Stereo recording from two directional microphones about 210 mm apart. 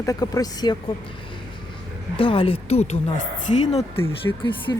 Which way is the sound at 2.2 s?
25° left (ahead or behind).